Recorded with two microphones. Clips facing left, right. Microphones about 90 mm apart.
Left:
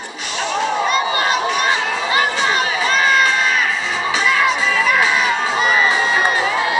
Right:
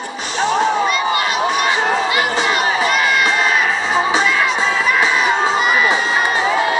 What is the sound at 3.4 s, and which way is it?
Music, 35° right (ahead or behind).